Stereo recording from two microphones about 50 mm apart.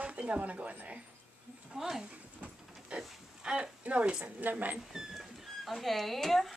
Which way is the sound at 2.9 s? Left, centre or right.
Centre.